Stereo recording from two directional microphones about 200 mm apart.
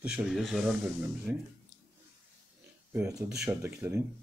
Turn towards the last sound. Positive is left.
turn(degrees=-15)  # may be behind; listen again after turning